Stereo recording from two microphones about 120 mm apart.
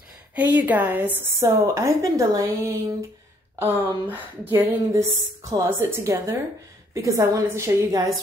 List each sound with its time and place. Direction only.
0.4 s speech: 15° right (ahead or behind)
3.8 s speech: 15° right (ahead or behind)